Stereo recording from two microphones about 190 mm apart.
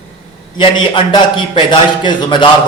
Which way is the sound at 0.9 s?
25° left (ahead or behind).